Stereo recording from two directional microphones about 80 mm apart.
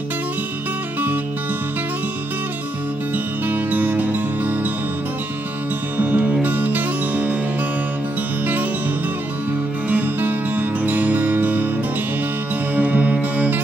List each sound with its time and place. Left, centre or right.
3.4 s music: right
5.9 s music: right
9.8 s music: right
12.7 s music: centre